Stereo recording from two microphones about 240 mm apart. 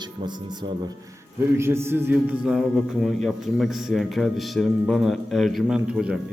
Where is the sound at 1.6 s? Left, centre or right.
Centre.